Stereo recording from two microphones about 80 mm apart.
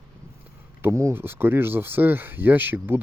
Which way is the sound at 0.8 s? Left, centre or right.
Right.